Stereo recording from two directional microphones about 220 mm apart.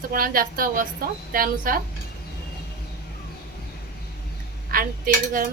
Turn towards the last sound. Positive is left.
turn(degrees=-40)  # may be behind; listen again after turning